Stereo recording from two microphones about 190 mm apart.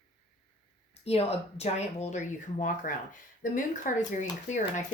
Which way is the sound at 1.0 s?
35° left (ahead or behind).